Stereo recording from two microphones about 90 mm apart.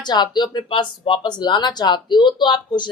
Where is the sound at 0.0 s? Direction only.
55° left (ahead or behind).